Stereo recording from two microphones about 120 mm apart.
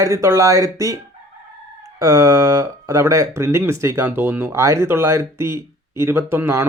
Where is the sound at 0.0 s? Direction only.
25° right (ahead or behind).